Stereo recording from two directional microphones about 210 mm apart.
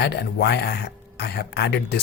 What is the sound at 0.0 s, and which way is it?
Speech, 50° left (ahead or behind).